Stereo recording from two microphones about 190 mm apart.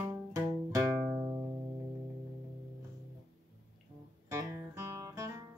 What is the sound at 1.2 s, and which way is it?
Music, 15° right (ahead or behind).